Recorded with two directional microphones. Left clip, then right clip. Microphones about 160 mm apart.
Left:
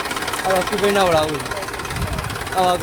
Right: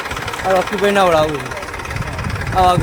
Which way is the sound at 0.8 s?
50° right (ahead or behind).